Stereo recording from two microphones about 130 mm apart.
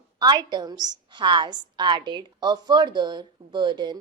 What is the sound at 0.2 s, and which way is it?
A woman's voice, 35° right (ahead or behind).